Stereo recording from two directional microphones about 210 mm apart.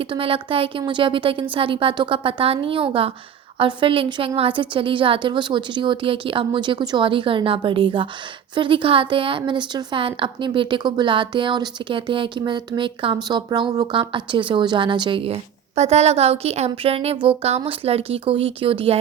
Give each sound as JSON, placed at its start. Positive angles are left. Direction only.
{"t": 0.0, "sound": "a woman's voice", "side_deg": -25}